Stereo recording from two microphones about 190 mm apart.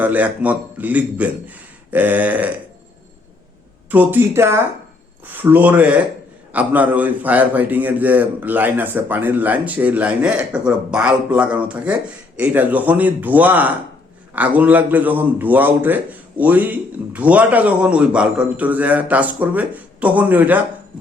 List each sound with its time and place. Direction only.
0.0 s a man's voice: 10° right (ahead or behind)
3.9 s a man's voice: 10° right (ahead or behind)